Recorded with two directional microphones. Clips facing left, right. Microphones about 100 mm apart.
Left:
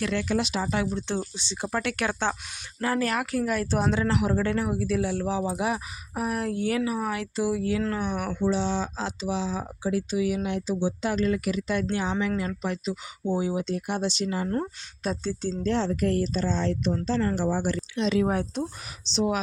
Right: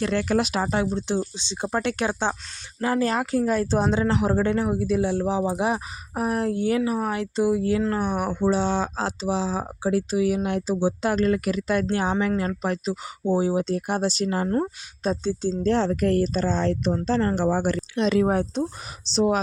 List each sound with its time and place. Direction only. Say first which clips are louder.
0.0 s speech: right 4 dB; 40° right (ahead or behind)
0.7 s speech: right 3 dB; 30° right (ahead or behind); by 14.4 s 45° right (ahead or behind)
14.4 s speech: right 4 dB; 30° right (ahead or behind)
15.4 s speech: right 4 dB; 40° right (ahead or behind)
18.3 s speech: right 4 dB; 35° right (ahead or behind)